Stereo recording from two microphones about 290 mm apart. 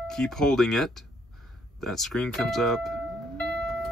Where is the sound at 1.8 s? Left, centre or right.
Centre.